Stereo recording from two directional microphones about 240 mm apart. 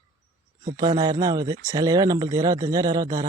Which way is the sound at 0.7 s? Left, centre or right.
Centre.